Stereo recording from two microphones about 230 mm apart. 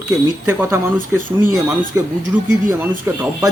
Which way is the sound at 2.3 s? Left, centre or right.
Centre.